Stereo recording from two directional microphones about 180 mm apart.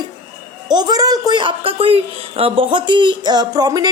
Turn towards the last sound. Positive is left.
turn(degrees=-20)  # may be behind; listen again after turning